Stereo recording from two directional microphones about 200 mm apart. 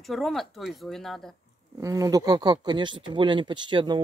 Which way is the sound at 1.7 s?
15° right (ahead or behind).